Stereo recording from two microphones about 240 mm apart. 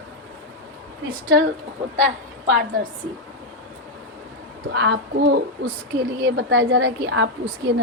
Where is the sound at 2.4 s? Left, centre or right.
Right.